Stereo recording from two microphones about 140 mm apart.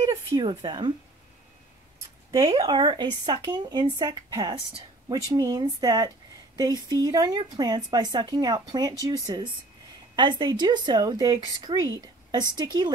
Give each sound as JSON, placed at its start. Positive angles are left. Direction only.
{"t": 0.0, "sound": "speech", "side_deg": -25}
{"t": 2.6, "sound": "a woman's voice", "side_deg": -35}